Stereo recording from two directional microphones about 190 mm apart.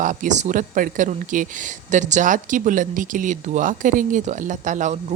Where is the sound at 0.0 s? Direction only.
40° right (ahead or behind).